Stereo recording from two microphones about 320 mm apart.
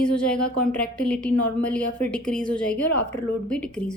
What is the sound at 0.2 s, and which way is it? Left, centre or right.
Speech, centre.